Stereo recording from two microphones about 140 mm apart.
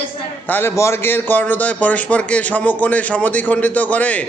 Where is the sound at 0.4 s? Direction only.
15° left (ahead or behind).